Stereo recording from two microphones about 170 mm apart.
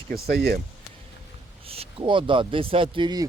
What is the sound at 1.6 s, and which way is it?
Speech, 35° right (ahead or behind).